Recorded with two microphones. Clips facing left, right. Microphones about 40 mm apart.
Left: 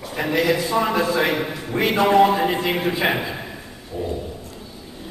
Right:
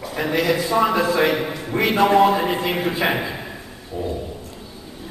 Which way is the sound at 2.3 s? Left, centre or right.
Left.